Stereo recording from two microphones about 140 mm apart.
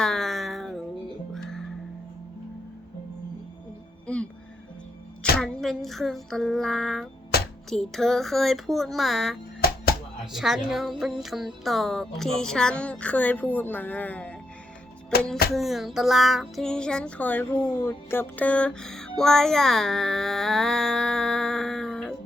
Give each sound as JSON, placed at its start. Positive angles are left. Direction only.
{"t": 0.0, "sound": "a sound", "side_deg": 5}
{"t": 1.3, "sound": "music", "side_deg": 5}
{"t": 4.0, "sound": "music", "side_deg": 10}
{"t": 5.4, "sound": "music", "side_deg": 0}
{"t": 7.3, "sound": "music", "side_deg": 90}
{"t": 7.7, "sound": "music", "side_deg": 0}
{"t": 9.6, "sound": "music", "side_deg": 90}
{"t": 10.3, "sound": "music", "side_deg": 0}
{"t": 15.5, "sound": "music", "side_deg": 0}